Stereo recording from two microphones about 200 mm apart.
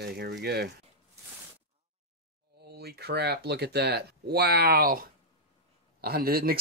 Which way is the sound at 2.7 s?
55° right (ahead or behind).